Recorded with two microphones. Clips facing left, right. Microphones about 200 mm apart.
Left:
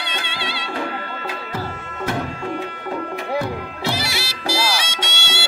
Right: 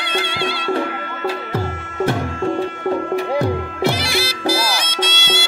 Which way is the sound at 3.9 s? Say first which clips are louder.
Right 5 dB; 50° right (ahead or behind).